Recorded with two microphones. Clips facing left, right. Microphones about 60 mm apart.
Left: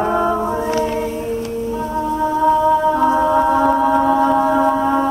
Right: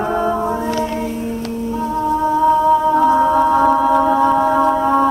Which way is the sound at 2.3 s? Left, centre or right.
Centre.